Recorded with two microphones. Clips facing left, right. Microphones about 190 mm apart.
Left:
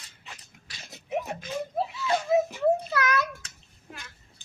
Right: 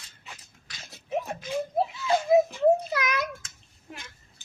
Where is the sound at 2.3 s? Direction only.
15° right (ahead or behind).